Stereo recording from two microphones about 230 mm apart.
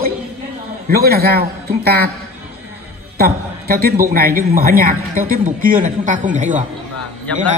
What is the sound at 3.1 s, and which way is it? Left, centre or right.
A man's voice, right.